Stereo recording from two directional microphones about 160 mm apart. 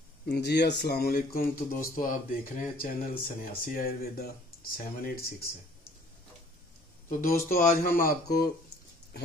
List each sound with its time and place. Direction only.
0.3 s speech: 90° left; by 5.3 s 65° left (ahead or behind)
7.1 s speech: 60° left (ahead or behind)